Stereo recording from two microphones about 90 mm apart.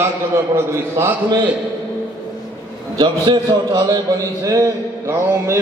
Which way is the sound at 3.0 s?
50° right (ahead or behind).